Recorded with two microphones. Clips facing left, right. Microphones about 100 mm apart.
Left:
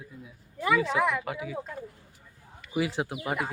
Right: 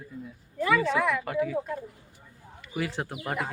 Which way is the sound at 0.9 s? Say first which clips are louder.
Even; 20° left (ahead or behind).